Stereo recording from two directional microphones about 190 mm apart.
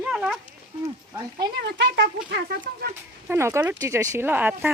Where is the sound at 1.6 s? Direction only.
60° right (ahead or behind).